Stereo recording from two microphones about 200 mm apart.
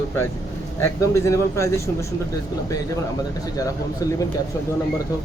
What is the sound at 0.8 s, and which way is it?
Speech, 15° left (ahead or behind).